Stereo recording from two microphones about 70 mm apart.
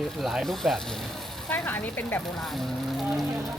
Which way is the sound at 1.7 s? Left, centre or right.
Left.